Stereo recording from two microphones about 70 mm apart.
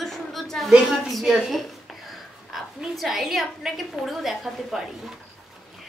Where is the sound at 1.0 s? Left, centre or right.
Centre.